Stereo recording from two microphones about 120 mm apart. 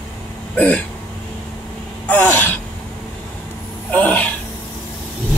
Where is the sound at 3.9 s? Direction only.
15° left (ahead or behind).